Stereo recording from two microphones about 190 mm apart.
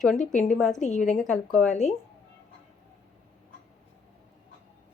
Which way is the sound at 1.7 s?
40° left (ahead or behind).